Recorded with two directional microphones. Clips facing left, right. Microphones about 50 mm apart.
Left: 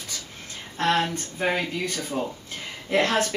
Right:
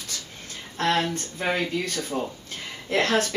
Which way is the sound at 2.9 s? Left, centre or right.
Left.